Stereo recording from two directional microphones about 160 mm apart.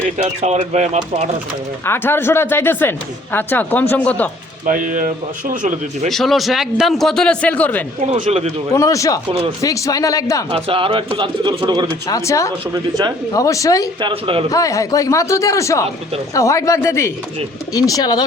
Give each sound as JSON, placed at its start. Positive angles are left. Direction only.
{"t": 0.0, "sound": "speech", "side_deg": -45}
{"t": 1.8, "sound": "speech", "side_deg": 15}
{"t": 4.6, "sound": "speech", "side_deg": -55}
{"t": 6.1, "sound": "a man's voice", "side_deg": 0}
{"t": 8.1, "sound": "speech", "side_deg": -40}
{"t": 8.7, "sound": "speech", "side_deg": 20}
{"t": 10.5, "sound": "speech", "side_deg": -35}
{"t": 12.0, "sound": "speech", "side_deg": 20}
{"t": 12.7, "sound": "speech", "side_deg": -25}
{"t": 13.3, "sound": "speech", "side_deg": 20}
{"t": 14.0, "sound": "speech", "side_deg": -35}
{"t": 14.5, "sound": "speech", "side_deg": 20}